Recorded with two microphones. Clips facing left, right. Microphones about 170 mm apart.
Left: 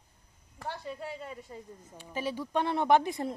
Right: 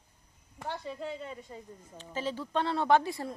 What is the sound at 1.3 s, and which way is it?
A man's voice, 5° left (ahead or behind).